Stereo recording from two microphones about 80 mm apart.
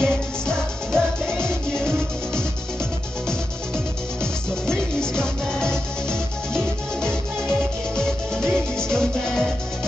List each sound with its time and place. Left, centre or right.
0.0 s music: centre
3.3 s music: centre